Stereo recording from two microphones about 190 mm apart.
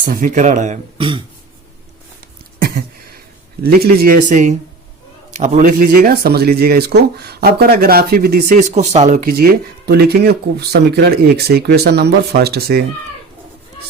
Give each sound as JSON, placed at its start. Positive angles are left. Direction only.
{"t": 0.0, "sound": "speech", "side_deg": -45}
{"t": 2.6, "sound": "a sound", "side_deg": -55}
{"t": 3.6, "sound": "speech", "side_deg": -55}